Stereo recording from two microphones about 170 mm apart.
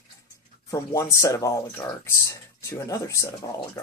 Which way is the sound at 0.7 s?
20° left (ahead or behind).